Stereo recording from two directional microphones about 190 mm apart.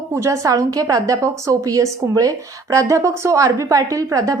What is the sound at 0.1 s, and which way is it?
A woman's voice, 15° right (ahead or behind).